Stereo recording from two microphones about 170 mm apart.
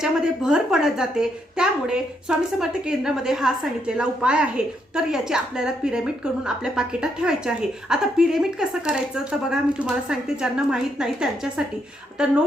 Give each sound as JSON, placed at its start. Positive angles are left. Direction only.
{"t": 0.0, "sound": "a woman's voice", "side_deg": -5}